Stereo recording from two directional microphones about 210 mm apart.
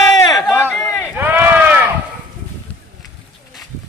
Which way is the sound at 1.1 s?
10° right (ahead or behind).